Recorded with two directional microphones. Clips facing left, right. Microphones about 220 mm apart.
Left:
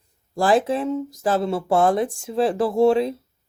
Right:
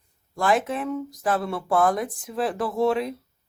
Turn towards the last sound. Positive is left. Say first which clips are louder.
# left 6 dB
turn(degrees=30)  # may be behind; listen again after turning